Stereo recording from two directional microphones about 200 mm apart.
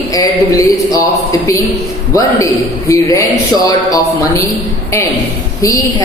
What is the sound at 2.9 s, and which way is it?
Speech, 15° left (ahead or behind).